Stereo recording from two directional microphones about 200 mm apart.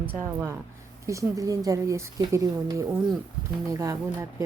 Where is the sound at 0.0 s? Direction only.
10° right (ahead or behind).